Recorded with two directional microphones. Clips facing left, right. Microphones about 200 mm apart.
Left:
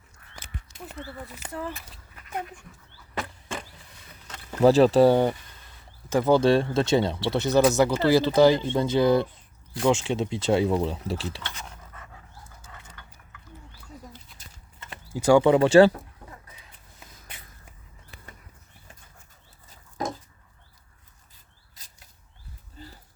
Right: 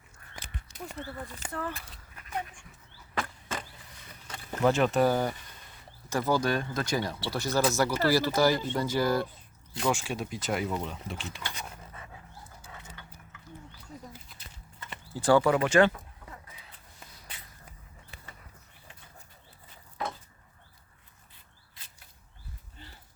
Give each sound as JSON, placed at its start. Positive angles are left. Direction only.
{"t": 0.3, "sound": "a sound", "side_deg": -10}
{"t": 0.9, "sound": "speech", "side_deg": 10}
{"t": 4.6, "sound": "speech", "side_deg": 35}
{"t": 11.4, "sound": "dog", "side_deg": -10}
{"t": 14.3, "sound": "clip-clop", "side_deg": 0}
{"t": 15.1, "sound": "speech", "side_deg": 10}
{"t": 15.4, "sound": "speech", "side_deg": 30}
{"t": 20.0, "sound": "chicken", "side_deg": 40}
{"t": 21.8, "sound": "rodents", "side_deg": 40}
{"t": 22.8, "sound": "a sound", "side_deg": 40}